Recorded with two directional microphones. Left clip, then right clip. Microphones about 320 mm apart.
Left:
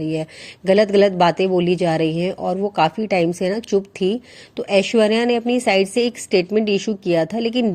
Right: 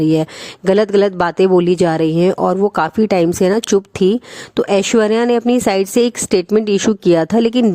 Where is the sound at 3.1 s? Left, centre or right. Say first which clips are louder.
Right 6 dB; right.